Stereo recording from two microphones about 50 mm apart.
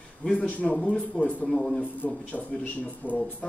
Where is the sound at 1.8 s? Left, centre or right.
Left.